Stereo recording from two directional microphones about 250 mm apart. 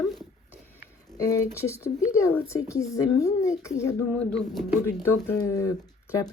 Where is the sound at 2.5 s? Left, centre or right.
Centre.